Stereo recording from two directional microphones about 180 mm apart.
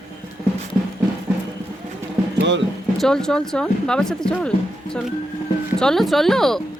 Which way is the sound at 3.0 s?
5° left (ahead or behind).